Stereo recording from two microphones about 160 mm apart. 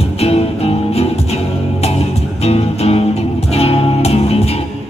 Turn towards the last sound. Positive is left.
turn(degrees=40)  # may be behind; listen again after turning